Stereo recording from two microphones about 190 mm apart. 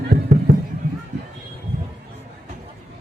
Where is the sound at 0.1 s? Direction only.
60° right (ahead or behind).